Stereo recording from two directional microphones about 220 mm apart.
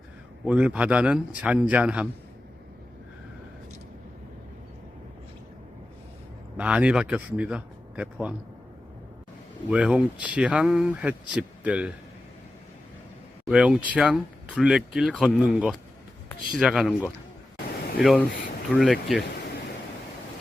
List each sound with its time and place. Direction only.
0.4 s speech: 5° right (ahead or behind)
6.6 s speech: 5° right (ahead or behind)
9.6 s speech: 5° right (ahead or behind)
13.4 s speech: 5° right (ahead or behind)